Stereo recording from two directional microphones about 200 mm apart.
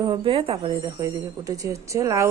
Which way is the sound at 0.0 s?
25° right (ahead or behind).